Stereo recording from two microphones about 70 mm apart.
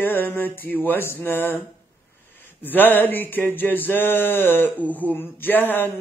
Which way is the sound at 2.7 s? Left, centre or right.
Left.